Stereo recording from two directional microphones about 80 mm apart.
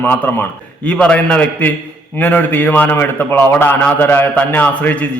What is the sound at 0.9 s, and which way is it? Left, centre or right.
A man's voice, centre.